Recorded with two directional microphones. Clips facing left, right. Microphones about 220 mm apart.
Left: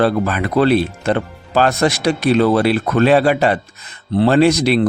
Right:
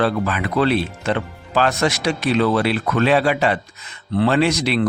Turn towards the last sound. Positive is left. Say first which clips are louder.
# left 5 dB
turn(degrees=35)  # may be behind; listen again after turning